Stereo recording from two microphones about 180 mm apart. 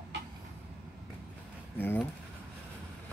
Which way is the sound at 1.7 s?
10° left (ahead or behind).